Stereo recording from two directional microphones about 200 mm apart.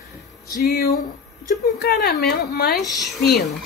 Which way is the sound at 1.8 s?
50° left (ahead or behind).